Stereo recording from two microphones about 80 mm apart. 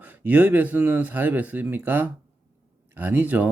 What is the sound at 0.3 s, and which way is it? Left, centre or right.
Speech, right.